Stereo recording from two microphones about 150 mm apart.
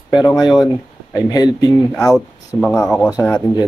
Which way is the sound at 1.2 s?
25° left (ahead or behind).